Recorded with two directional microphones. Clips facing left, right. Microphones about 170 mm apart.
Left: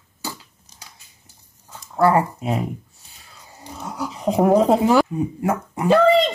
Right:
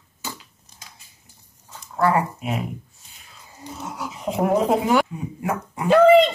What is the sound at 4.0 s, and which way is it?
Speech, 35° left (ahead or behind).